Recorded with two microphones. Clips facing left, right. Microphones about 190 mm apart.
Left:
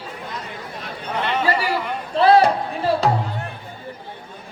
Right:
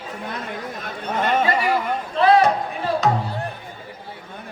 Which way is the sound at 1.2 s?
45° right (ahead or behind).